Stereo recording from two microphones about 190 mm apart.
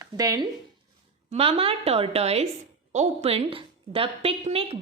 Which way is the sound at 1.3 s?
30° right (ahead or behind).